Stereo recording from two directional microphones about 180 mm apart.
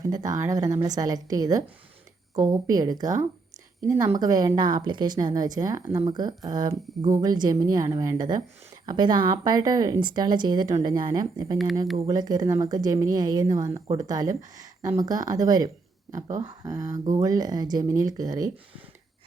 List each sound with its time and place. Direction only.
0.0 s speech: 20° right (ahead or behind)
11.5 s speech: centre (ahead or behind)
12.0 s speech: 20° right (ahead or behind)